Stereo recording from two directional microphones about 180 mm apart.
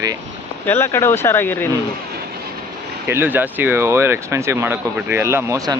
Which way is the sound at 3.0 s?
10° right (ahead or behind).